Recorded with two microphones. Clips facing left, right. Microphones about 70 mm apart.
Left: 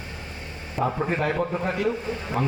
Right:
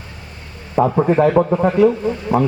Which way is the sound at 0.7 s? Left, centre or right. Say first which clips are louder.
Right 11 dB; right.